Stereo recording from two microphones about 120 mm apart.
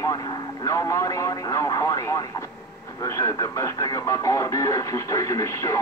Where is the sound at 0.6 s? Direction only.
25° left (ahead or behind).